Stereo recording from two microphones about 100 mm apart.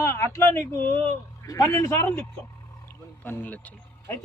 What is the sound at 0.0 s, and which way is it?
Speech, 25° left (ahead or behind).